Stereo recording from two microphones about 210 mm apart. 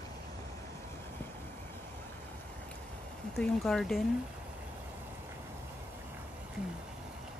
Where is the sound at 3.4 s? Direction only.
Centre (ahead or behind).